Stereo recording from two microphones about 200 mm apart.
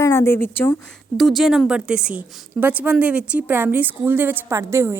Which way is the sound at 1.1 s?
Centre (ahead or behind).